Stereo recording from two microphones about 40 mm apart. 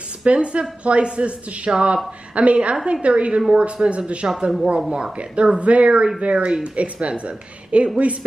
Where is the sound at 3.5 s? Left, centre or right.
Centre.